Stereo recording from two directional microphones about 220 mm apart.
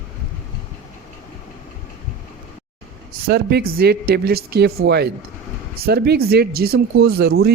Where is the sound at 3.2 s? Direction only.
45° right (ahead or behind).